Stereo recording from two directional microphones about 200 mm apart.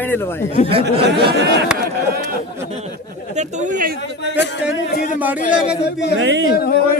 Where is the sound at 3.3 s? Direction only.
35° right (ahead or behind).